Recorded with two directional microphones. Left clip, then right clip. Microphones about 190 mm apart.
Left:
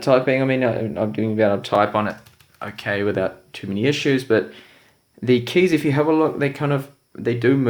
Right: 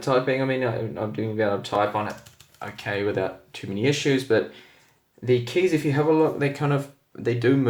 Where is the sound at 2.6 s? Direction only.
20° left (ahead or behind).